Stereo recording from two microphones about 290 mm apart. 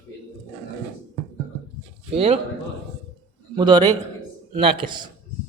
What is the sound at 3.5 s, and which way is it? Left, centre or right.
Speech, centre.